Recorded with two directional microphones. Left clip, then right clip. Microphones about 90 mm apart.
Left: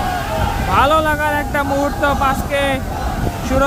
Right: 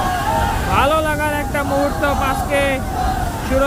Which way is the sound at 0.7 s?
40° left (ahead or behind).